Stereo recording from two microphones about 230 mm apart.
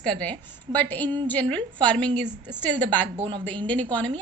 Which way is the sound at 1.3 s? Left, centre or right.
Centre.